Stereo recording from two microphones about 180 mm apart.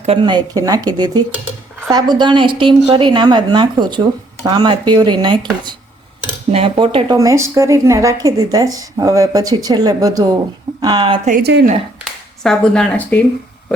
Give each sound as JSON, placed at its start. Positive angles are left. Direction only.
{"t": 0.0, "sound": "speech", "side_deg": -30}
{"t": 7.2, "sound": "speech", "side_deg": -15}
{"t": 11.3, "sound": "speech", "side_deg": -55}
{"t": 12.4, "sound": "speech", "side_deg": 5}